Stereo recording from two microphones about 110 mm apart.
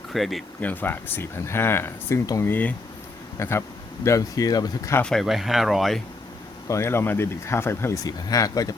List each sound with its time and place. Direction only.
0.1 s speech: centre (ahead or behind)
0.6 s speech: 15° left (ahead or behind)
2.4 s speech: 15° left (ahead or behind); by 4.9 s 35° left (ahead or behind)
5.0 s speech: centre (ahead or behind)
6.7 s speech: 25° left (ahead or behind)